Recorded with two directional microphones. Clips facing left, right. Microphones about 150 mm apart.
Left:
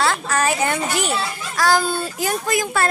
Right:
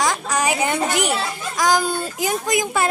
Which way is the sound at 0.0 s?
15° right (ahead or behind).